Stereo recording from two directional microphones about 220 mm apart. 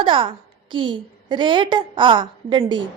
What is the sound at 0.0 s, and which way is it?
A woman's voice, 20° right (ahead or behind).